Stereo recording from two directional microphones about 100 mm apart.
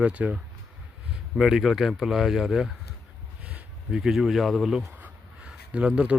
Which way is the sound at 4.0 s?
Centre (ahead or behind).